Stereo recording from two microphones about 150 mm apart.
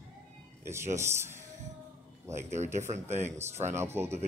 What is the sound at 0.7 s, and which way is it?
A man's voice, 20° right (ahead or behind).